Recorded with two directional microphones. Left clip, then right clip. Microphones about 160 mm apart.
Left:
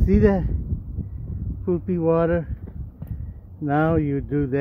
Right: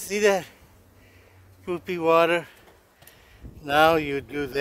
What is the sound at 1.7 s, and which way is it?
Speech, 45° right (ahead or behind).